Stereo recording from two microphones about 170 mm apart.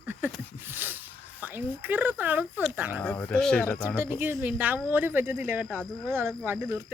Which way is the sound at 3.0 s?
5° left (ahead or behind).